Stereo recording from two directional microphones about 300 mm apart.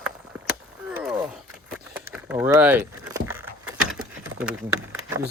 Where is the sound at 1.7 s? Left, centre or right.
Centre.